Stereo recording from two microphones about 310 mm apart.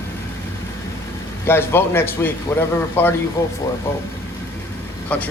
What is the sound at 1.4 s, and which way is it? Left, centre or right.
A man's voice, centre.